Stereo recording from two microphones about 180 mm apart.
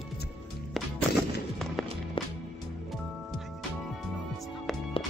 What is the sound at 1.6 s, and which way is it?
Music, centre (ahead or behind).